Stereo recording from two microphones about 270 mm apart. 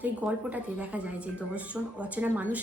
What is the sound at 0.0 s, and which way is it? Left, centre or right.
A woman's voice, centre.